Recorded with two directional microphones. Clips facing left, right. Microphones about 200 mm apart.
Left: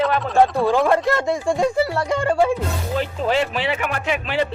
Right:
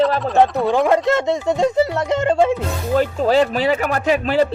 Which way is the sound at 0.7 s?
20° right (ahead or behind).